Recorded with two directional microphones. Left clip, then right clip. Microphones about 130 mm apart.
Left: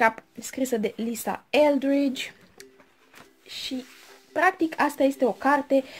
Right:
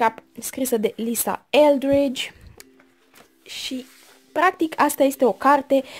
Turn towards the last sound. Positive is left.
turn(degrees=-40)  # may be behind; listen again after turning